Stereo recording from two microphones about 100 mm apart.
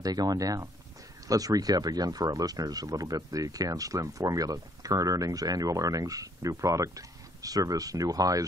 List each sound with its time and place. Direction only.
0.0 s speech: 40° right (ahead or behind)